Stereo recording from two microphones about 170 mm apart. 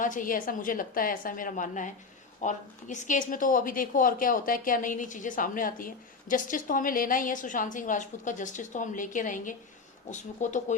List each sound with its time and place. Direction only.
0.0 s a woman's voice: 50° left (ahead or behind)